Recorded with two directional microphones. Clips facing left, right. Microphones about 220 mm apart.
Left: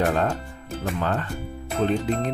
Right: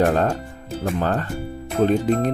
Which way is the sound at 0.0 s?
40° right (ahead or behind).